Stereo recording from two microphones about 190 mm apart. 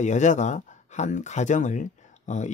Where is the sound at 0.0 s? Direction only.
40° left (ahead or behind).